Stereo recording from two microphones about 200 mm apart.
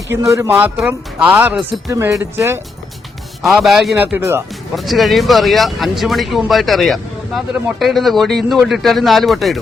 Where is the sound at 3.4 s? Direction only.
Centre (ahead or behind).